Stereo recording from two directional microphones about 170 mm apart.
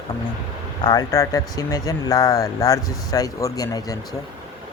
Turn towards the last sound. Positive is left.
turn(degrees=20)  # may be behind; listen again after turning